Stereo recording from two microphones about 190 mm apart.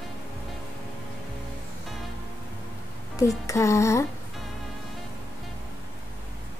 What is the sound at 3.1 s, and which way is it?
Music, 15° left (ahead or behind).